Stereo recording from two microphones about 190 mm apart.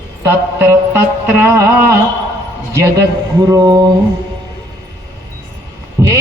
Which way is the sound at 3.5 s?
20° right (ahead or behind).